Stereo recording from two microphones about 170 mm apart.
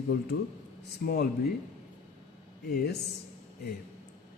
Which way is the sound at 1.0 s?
65° left (ahead or behind).